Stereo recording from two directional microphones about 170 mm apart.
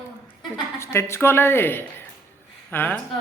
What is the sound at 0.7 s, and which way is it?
A man's voice, 15° left (ahead or behind).